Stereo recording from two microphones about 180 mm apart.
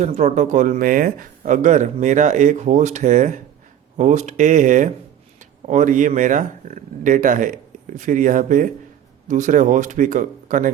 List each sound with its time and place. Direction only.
0.0 s speech: 40° right (ahead or behind)